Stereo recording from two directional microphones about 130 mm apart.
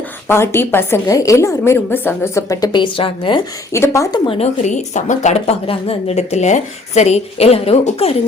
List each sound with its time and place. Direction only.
0.3 s a woman's voice: 20° left (ahead or behind); by 3.4 s 40° left (ahead or behind)
3.7 s a woman's voice: 20° left (ahead or behind)
4.3 s a woman's voice: 60° left (ahead or behind)